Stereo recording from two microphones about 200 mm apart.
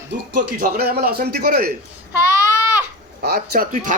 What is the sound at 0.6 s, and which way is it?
A man's voice, 50° right (ahead or behind).